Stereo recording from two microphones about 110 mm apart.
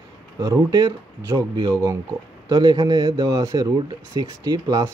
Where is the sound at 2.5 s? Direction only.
40° right (ahead or behind).